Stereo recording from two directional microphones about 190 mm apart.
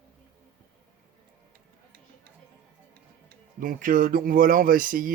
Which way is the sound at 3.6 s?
45° right (ahead or behind).